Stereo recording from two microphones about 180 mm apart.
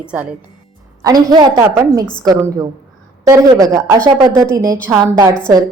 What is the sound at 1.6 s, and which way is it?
A woman's voice, 10° right (ahead or behind).